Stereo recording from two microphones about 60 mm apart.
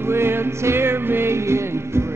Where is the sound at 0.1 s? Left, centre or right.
Right.